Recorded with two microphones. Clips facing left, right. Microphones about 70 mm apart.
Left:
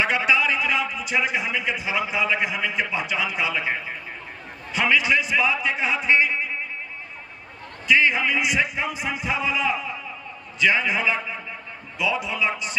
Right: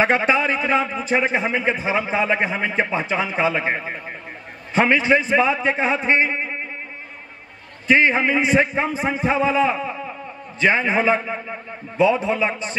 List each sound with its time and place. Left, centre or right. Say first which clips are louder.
0.0 s a man's voice: right 4 dB; right
7.8 s a man's voice: right 3 dB; right